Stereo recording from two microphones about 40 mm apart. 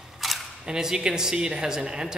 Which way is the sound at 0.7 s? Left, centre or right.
Centre.